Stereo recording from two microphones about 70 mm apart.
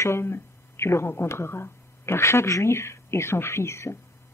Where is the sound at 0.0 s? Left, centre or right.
Left.